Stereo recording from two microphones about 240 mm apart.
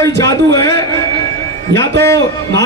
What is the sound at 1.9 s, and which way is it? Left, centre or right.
Speech, right.